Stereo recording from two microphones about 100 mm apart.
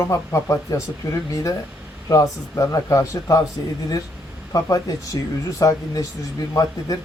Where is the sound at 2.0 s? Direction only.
35° left (ahead or behind).